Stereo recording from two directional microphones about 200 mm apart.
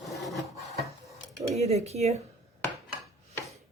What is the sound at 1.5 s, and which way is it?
Speech, 35° right (ahead or behind).